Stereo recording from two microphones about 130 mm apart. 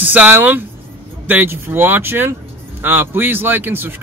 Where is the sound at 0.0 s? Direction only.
10° right (ahead or behind).